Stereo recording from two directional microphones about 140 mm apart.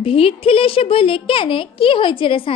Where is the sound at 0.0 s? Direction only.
40° left (ahead or behind).